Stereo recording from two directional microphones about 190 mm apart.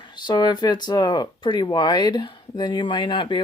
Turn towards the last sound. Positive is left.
turn(degrees=25)  # may be behind; listen again after turning